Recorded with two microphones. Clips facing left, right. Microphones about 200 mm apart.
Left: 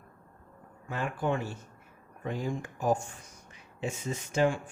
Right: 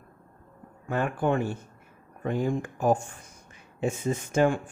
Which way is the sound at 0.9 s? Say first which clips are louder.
Right 5 dB; 55° right (ahead or behind).